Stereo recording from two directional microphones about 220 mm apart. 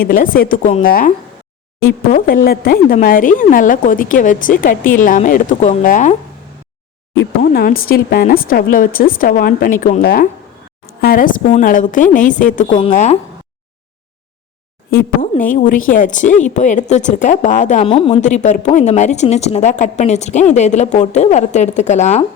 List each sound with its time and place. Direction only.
0.0 s speech: 40° left (ahead or behind)
2.1 s speech: 40° left (ahead or behind)
7.2 s speech: 45° left (ahead or behind)
14.8 s speech: 40° left (ahead or behind)